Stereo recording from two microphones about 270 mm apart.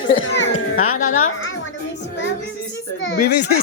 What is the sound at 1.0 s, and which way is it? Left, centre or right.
Speech, left.